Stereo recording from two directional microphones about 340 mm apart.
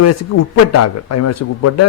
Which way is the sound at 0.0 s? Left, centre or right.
Left.